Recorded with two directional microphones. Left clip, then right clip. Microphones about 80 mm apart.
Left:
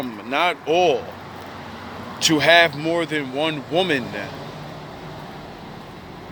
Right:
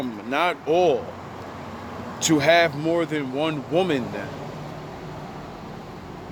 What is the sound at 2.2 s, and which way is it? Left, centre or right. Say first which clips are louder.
Speech: left 3 dB; right.